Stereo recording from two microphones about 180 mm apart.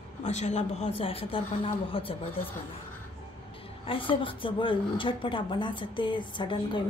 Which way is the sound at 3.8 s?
30° left (ahead or behind).